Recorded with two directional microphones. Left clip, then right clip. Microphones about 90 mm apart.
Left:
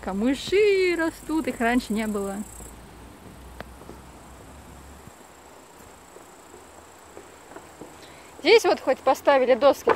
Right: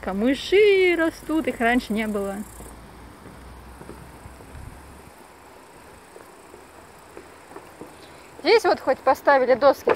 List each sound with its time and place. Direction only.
0.0 s speech: 5° left (ahead or behind)
0.4 s speech: 10° right (ahead or behind)
1.3 s speech: 15° left (ahead or behind)
8.4 s speech: 45° left (ahead or behind)